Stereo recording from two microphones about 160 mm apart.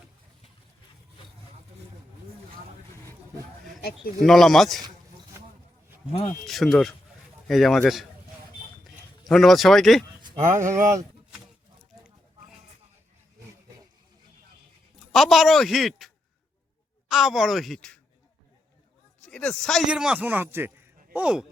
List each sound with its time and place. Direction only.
4.2 s speech: centre (ahead or behind)
6.4 s speech: centre (ahead or behind)
9.2 s speech: centre (ahead or behind)
10.8 s speech: 20° right (ahead or behind)
15.1 s speech: centre (ahead or behind)
19.2 s speech: 5° left (ahead or behind)